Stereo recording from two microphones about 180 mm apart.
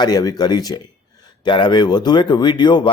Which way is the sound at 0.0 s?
20° left (ahead or behind).